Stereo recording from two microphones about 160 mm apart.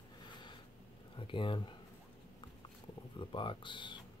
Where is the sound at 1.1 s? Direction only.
30° left (ahead or behind).